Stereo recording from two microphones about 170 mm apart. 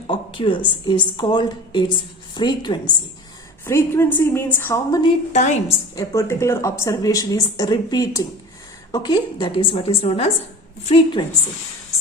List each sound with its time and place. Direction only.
0.1 s a sound: 30° left (ahead or behind)
0.9 s speech: 25° left (ahead or behind)
3.7 s a woman's voice: 15° left (ahead or behind)
5.3 s a woman's voice: 45° left (ahead or behind)
6.0 s a woman's voice: 15° left (ahead or behind); by 11.2 s 35° left (ahead or behind)